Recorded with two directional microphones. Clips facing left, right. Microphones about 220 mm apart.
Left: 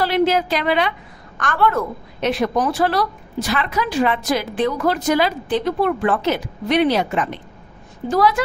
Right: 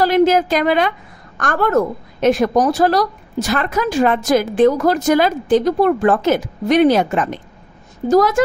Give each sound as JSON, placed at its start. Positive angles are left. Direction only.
{"t": 0.0, "sound": "a woman's voice", "side_deg": -45}